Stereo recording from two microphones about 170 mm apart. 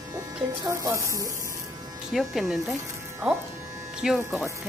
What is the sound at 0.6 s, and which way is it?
Speech, 15° right (ahead or behind).